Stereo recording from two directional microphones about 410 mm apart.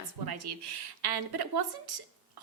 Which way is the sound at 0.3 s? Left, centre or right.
Right.